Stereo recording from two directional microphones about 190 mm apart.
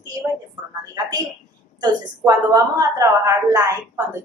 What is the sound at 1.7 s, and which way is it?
Speech, 20° right (ahead or behind).